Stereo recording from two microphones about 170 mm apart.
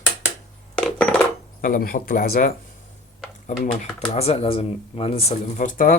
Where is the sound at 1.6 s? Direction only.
60° left (ahead or behind).